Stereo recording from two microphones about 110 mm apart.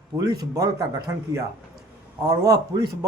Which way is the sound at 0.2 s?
30° right (ahead or behind).